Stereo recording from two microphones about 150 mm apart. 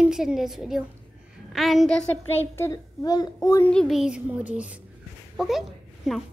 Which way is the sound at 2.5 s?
20° left (ahead or behind).